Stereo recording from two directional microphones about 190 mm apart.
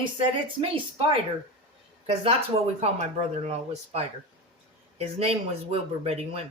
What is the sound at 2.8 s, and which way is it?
Speech, 35° right (ahead or behind).